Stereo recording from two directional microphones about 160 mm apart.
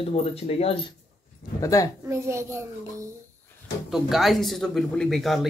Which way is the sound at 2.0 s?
15° right (ahead or behind).